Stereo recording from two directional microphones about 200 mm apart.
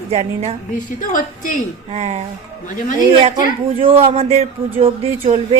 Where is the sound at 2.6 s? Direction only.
40° left (ahead or behind).